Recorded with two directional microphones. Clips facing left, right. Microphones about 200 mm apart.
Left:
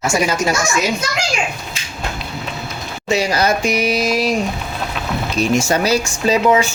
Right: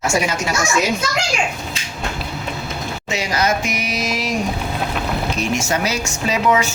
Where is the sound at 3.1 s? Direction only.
35° left (ahead or behind).